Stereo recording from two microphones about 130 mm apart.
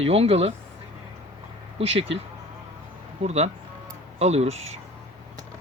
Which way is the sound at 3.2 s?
55° right (ahead or behind).